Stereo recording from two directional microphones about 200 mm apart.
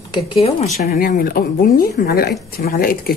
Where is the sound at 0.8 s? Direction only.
45° left (ahead or behind).